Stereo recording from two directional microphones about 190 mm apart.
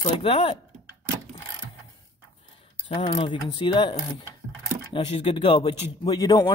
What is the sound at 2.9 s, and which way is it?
Speech, 30° left (ahead or behind).